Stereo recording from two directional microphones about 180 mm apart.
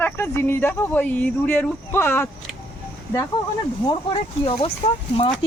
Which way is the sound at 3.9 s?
30° left (ahead or behind).